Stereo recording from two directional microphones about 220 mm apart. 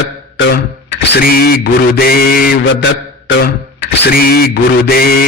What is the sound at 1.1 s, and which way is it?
Mantra, 45° left (ahead or behind).